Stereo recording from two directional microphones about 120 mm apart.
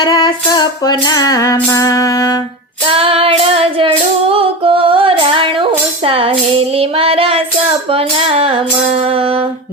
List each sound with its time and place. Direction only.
0.0 s music: 35° left (ahead or behind)
2.9 s female singing: 50° right (ahead or behind)
7.9 s music: 50° right (ahead or behind)